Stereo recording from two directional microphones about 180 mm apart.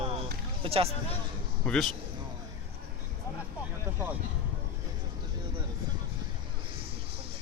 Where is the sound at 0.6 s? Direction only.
30° right (ahead or behind).